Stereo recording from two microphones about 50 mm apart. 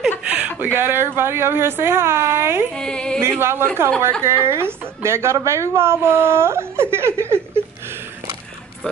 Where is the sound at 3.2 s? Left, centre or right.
Right.